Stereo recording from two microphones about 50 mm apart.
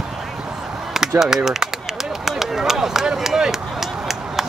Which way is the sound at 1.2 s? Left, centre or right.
Centre.